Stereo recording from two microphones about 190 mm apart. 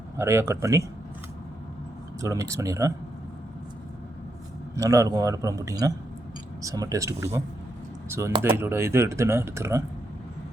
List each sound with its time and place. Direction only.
0.2 s speech: 15° right (ahead or behind)
2.2 s speech: 15° right (ahead or behind)
4.8 s speech: 15° right (ahead or behind)